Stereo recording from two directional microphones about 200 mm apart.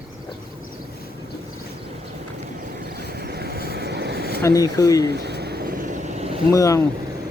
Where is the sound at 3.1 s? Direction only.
50° right (ahead or behind).